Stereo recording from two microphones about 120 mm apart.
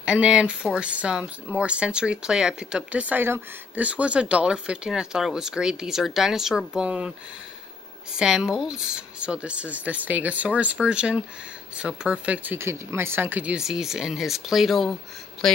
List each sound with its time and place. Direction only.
0.0 s speech: 10° right (ahead or behind)